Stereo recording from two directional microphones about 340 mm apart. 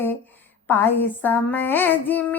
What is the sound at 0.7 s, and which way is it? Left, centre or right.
Child singing, centre.